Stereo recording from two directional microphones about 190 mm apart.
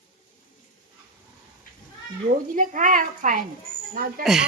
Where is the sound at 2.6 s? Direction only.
45° right (ahead or behind).